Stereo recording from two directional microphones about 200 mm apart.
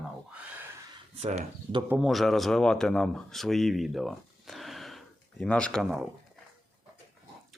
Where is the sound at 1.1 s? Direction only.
30° right (ahead or behind).